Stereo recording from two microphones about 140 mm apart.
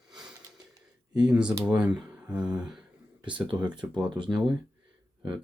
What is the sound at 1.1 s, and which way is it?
Speech, 5° right (ahead or behind).